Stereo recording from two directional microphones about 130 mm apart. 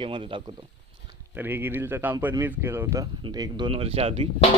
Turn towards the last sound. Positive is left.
turn(degrees=-50)  # may be behind; listen again after turning